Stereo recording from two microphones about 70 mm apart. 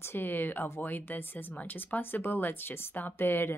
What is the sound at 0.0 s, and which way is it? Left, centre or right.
Speech, left.